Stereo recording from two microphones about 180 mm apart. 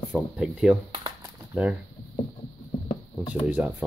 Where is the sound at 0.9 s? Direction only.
25° right (ahead or behind).